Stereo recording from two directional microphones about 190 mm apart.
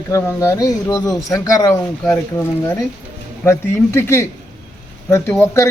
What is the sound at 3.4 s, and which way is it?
A man's voice, 15° left (ahead or behind).